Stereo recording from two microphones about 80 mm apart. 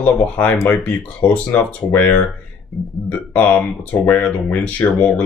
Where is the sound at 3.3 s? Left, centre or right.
Centre.